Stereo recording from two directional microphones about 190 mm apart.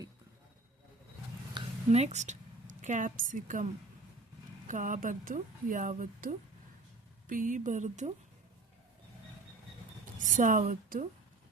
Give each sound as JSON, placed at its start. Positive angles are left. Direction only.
{"t": 1.5, "sound": "a woman's voice", "side_deg": -35}
{"t": 4.7, "sound": "speech", "side_deg": -45}
{"t": 10.2, "sound": "speech", "side_deg": -40}